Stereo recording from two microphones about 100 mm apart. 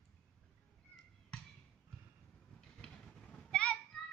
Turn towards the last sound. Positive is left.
turn(degrees=10)  # may be behind; listen again after turning